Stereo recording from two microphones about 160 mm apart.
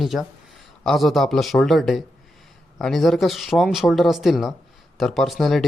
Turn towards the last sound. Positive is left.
turn(degrees=0)  # may be behind; listen again after turning